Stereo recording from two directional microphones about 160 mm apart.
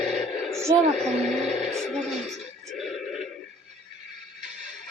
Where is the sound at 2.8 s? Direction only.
Centre (ahead or behind).